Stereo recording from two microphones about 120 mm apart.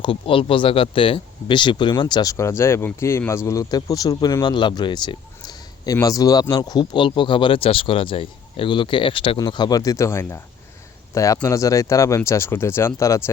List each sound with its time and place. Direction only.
0.0 s speech: 45° left (ahead or behind)
9.4 s speech: 35° left (ahead or behind)